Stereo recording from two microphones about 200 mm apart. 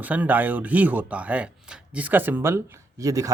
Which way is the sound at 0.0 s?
10° right (ahead or behind).